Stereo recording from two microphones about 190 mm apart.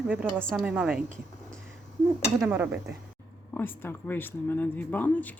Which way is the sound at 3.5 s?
10° left (ahead or behind).